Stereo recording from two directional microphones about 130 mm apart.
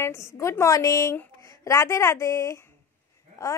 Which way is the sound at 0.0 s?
20° left (ahead or behind).